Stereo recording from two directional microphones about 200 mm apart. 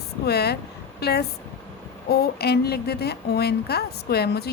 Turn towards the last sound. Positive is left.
turn(degrees=55)  # may be behind; listen again after turning